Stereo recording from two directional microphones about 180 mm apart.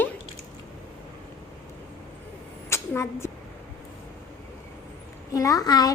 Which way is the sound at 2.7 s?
15° left (ahead or behind).